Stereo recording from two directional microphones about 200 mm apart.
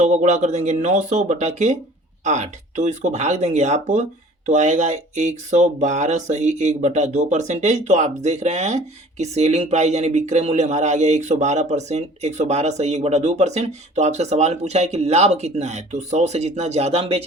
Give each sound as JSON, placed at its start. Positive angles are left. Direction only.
{"t": 0.0, "sound": "speech", "side_deg": -35}